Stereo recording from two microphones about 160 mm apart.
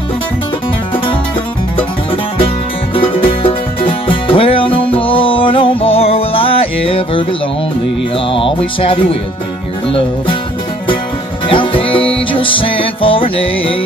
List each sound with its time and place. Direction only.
2.9 s music: 35° left (ahead or behind)
8.3 s music: 35° left (ahead or behind)
11.4 s music: 35° left (ahead or behind)